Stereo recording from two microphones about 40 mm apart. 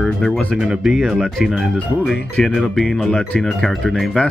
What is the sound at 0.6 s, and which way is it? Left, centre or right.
Speech, centre.